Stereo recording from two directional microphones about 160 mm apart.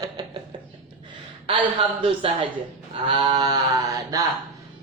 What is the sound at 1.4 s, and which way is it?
A man's voice, 35° right (ahead or behind).